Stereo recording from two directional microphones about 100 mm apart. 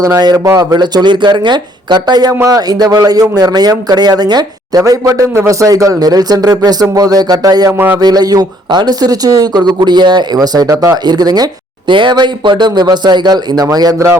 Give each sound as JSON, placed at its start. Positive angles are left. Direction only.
{"t": 0.0, "sound": "speech", "side_deg": -40}
{"t": 4.8, "sound": "speech", "side_deg": -30}
{"t": 7.7, "sound": "speech", "side_deg": -20}
{"t": 7.9, "sound": "speech", "side_deg": -40}
{"t": 11.9, "sound": "speech", "side_deg": -50}